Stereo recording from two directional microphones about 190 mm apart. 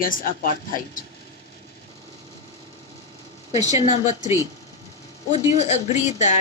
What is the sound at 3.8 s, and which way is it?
Speech, 35° left (ahead or behind).